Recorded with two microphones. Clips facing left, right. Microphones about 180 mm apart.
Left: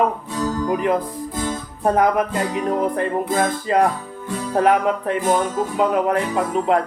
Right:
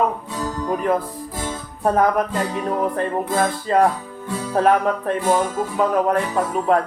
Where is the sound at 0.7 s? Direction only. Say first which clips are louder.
Right 2 dB; 15° left (ahead or behind).